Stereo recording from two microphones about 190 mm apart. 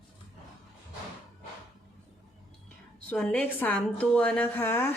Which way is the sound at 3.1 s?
5° left (ahead or behind).